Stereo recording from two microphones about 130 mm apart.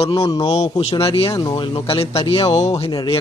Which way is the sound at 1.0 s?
45° left (ahead or behind).